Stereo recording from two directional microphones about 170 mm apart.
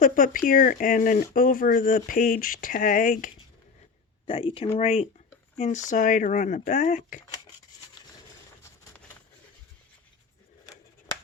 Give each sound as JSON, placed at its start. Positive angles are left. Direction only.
{"t": 0.0, "sound": "speech", "side_deg": 50}
{"t": 4.3, "sound": "speech", "side_deg": 30}